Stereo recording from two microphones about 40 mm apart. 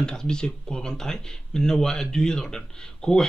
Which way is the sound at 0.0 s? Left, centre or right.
Centre.